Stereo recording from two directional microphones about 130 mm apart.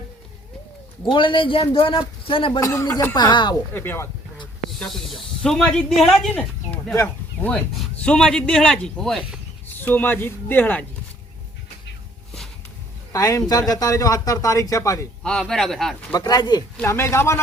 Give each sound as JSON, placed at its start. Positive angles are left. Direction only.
{"t": 1.0, "sound": "a man's voice", "side_deg": 40}
{"t": 2.6, "sound": "speech", "side_deg": 25}
{"t": 3.2, "sound": "a man's voice", "side_deg": 35}
{"t": 3.8, "sound": "speech", "side_deg": 15}
{"t": 4.8, "sound": "speech", "side_deg": 0}
{"t": 7.4, "sound": "speech", "side_deg": 10}
{"t": 9.6, "sound": "speech", "side_deg": 15}
{"t": 13.1, "sound": "speech", "side_deg": 25}
{"t": 15.2, "sound": "speech", "side_deg": 5}
{"t": 16.1, "sound": "speech", "side_deg": 30}
{"t": 16.8, "sound": "speech", "side_deg": 20}